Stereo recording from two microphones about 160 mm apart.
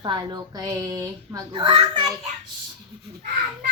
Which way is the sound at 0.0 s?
30° right (ahead or behind).